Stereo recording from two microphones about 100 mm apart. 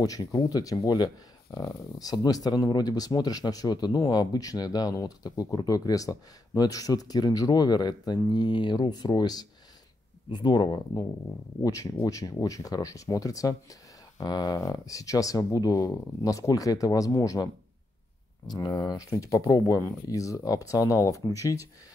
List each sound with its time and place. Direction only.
0.0 s speech: 40° left (ahead or behind)
11.6 s speech: 35° left (ahead or behind)
18.5 s speech: 40° left (ahead or behind)